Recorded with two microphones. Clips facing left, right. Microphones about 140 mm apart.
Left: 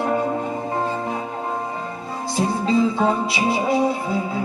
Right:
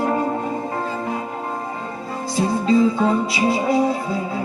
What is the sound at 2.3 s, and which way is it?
Music, centre (ahead or behind).